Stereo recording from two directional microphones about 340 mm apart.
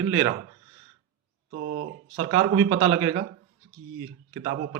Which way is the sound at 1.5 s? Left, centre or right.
Right.